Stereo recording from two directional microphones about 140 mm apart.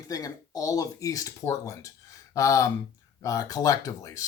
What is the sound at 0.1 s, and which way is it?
Speech, 25° left (ahead or behind).